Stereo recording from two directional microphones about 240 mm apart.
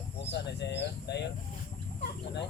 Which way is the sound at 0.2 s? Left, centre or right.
Left.